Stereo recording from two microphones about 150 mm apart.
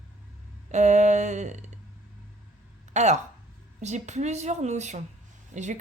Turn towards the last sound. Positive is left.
turn(degrees=-55)  # may be behind; listen again after turning